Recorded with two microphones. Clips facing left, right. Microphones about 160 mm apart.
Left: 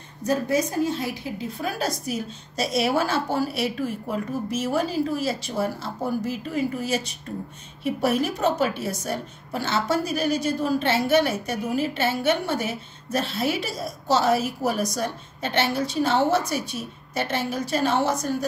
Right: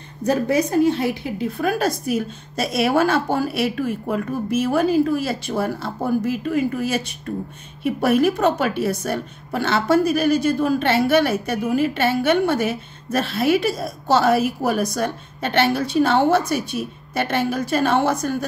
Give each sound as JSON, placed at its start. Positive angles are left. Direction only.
{"t": 0.3, "sound": "a woman's voice", "side_deg": -65}